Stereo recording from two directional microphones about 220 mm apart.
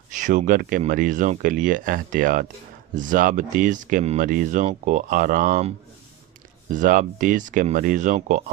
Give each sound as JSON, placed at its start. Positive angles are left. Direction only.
{"t": 0.1, "sound": "speech", "side_deg": -35}
{"t": 6.7, "sound": "speech", "side_deg": -35}